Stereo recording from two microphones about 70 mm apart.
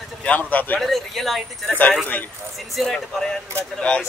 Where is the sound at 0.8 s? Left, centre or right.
Centre.